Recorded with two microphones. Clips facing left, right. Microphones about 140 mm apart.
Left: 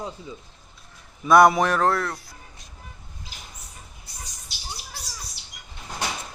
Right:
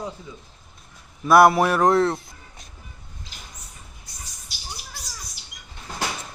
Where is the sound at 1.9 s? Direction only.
25° right (ahead or behind).